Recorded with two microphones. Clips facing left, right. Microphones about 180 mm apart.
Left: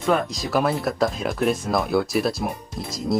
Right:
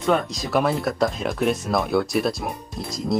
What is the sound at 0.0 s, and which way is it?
Speech, centre (ahead or behind).